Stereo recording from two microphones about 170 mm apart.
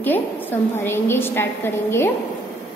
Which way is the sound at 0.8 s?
15° left (ahead or behind).